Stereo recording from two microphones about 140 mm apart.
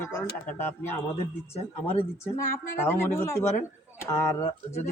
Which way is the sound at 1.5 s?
45° left (ahead or behind).